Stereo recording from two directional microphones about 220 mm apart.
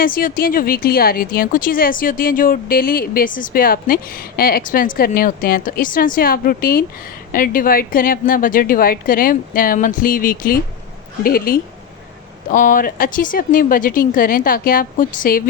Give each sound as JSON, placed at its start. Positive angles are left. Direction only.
{"t": 0.0, "sound": "speech", "side_deg": 40}